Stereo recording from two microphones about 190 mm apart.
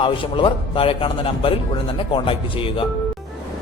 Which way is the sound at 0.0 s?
25° left (ahead or behind).